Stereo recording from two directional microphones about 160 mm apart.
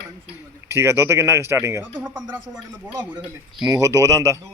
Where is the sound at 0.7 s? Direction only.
15° right (ahead or behind).